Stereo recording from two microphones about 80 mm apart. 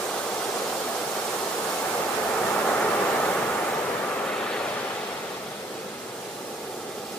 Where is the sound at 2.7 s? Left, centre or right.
Centre.